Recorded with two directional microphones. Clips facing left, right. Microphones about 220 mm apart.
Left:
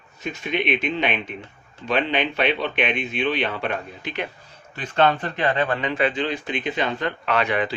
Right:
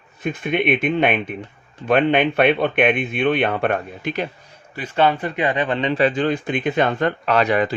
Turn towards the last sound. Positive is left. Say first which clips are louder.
# right 5 dB
turn(degrees=-40)  # may be behind; listen again after turning